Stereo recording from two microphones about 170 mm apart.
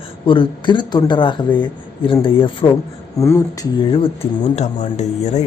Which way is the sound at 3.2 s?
20° left (ahead or behind).